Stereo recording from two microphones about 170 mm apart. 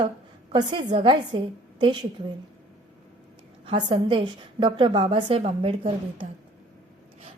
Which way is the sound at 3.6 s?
30° right (ahead or behind).